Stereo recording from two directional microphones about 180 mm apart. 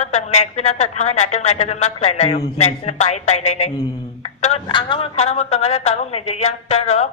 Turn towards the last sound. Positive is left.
turn(degrees=35)  # may be behind; listen again after turning